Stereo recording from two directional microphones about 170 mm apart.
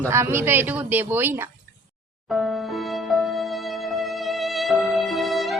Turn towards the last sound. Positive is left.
turn(degrees=0)  # may be behind; listen again after turning